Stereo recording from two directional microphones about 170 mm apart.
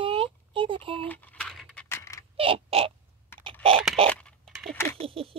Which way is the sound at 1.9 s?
15° left (ahead or behind).